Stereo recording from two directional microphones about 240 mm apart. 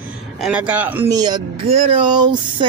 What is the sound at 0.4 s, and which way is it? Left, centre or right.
Speech, centre.